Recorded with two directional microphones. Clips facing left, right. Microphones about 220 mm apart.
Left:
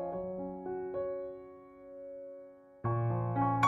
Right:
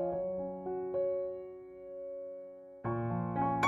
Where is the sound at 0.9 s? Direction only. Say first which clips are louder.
Right 6 dB; centre (ahead or behind).